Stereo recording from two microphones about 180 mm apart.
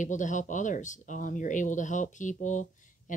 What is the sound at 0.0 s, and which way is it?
Speech, 45° left (ahead or behind).